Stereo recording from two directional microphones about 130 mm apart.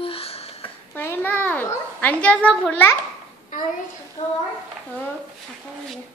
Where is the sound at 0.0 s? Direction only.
50° left (ahead or behind).